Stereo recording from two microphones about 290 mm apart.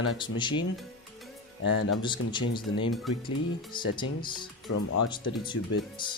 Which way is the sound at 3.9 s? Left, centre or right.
Centre.